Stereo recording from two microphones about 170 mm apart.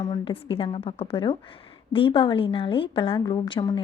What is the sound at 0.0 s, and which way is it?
A woman's voice, 25° left (ahead or behind).